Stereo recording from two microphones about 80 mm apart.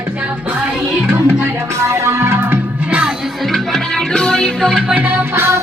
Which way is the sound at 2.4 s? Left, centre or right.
Centre.